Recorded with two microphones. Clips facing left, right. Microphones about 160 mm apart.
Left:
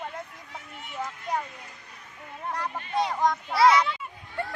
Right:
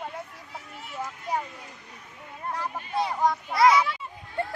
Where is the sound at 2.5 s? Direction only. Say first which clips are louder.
Even; 5° right (ahead or behind).